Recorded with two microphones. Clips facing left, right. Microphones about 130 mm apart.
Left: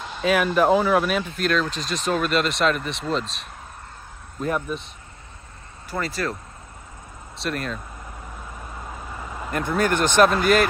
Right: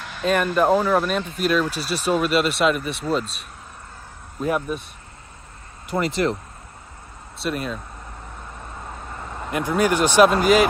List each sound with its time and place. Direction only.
0.2 s speech: 5° left (ahead or behind)
5.9 s speech: 20° right (ahead or behind)
7.4 s speech: 5° right (ahead or behind)
8.5 s a sound: 5° left (ahead or behind)